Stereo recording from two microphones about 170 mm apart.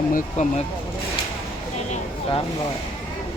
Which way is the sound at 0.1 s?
45° left (ahead or behind).